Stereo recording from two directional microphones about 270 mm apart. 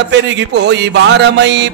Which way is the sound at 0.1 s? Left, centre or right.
Right.